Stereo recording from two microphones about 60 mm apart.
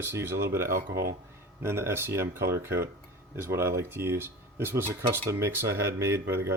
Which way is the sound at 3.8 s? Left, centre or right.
Right.